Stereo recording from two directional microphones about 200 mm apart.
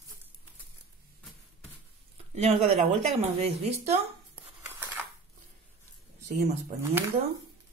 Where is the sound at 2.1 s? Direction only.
30° right (ahead or behind).